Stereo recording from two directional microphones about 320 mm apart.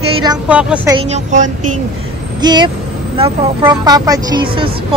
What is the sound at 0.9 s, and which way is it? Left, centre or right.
Speech, right.